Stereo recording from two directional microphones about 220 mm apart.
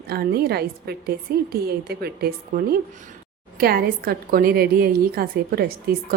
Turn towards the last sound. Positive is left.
turn(degrees=-45)  # may be behind; listen again after turning